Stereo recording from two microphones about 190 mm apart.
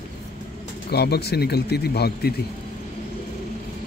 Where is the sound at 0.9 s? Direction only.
60° left (ahead or behind).